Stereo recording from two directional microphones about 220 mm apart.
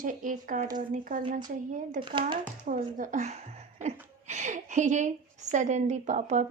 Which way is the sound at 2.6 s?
40° right (ahead or behind).